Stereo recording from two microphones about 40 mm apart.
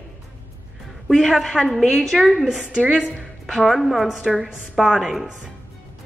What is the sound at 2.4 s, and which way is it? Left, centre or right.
Speech, centre.